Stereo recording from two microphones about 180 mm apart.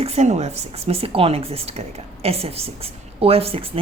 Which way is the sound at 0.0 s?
40° right (ahead or behind).